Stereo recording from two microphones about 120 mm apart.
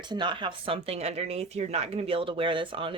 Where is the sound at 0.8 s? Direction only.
60° right (ahead or behind); by 2.9 s 45° right (ahead or behind).